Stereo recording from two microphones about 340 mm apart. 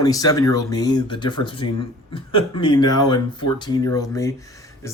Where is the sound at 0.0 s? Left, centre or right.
Centre.